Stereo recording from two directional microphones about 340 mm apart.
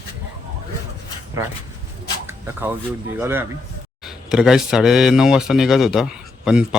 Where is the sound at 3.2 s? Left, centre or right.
Centre.